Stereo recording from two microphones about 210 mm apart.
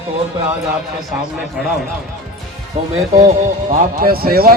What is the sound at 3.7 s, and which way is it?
Speech, 45° right (ahead or behind).